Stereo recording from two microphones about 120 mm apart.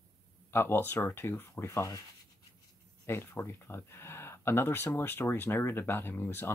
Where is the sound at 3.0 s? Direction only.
20° left (ahead or behind).